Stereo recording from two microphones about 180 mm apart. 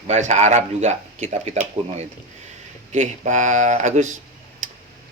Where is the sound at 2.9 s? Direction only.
40° right (ahead or behind).